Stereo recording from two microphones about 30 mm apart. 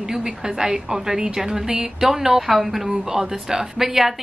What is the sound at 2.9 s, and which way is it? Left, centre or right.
Speech, centre.